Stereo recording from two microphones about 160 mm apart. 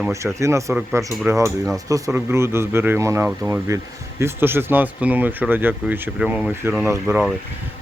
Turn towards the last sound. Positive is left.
turn(degrees=-5)  # may be behind; listen again after turning